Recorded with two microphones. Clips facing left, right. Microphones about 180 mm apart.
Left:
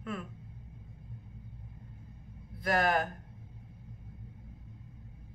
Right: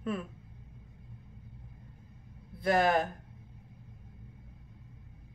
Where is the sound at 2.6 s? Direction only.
30° right (ahead or behind).